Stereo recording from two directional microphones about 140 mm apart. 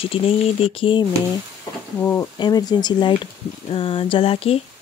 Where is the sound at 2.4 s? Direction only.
30° left (ahead or behind).